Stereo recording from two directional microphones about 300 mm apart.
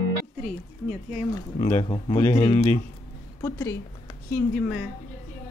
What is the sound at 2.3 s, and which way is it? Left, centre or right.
Speech, left.